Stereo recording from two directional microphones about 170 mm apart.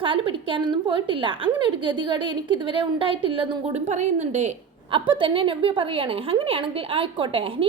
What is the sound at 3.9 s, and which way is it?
Speech, 40° right (ahead or behind).